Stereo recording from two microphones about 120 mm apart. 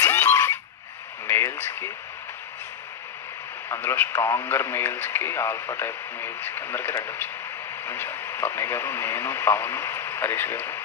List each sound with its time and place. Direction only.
0.0 s frog: 20° left (ahead or behind)
1.2 s a sound: 20° left (ahead or behind)
3.6 s speech: 20° left (ahead or behind)